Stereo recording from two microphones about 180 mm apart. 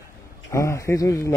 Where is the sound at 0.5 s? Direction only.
15° left (ahead or behind).